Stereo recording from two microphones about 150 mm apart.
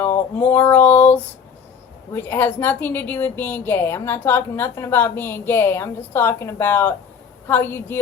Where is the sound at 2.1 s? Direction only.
15° left (ahead or behind).